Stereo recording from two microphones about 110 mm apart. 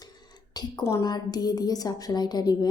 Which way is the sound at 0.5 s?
40° left (ahead or behind).